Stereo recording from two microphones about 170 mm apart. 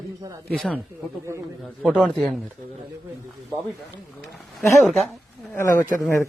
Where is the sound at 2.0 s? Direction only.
Centre (ahead or behind).